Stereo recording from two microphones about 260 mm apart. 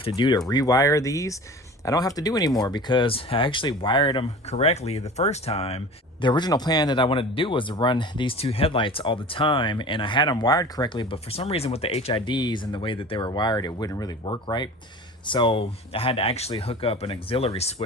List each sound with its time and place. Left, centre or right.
0.0 s speech: centre